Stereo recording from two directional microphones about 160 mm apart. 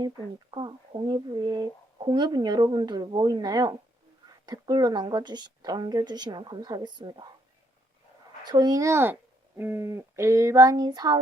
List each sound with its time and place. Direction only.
0.5 s speech: 30° right (ahead or behind)
8.4 s speech: 25° right (ahead or behind)